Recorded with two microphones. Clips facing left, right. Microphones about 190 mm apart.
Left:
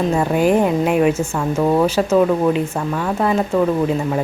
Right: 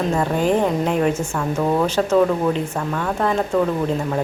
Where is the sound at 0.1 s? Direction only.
10° left (ahead or behind).